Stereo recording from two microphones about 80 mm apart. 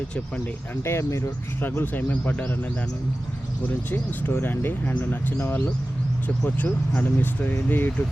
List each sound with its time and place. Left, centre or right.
0.9 s speech: left
1.6 s speech: left
3.9 s speech: left